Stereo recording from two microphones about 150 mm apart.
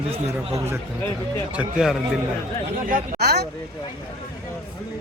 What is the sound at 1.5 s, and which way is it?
Speech, 5° right (ahead or behind).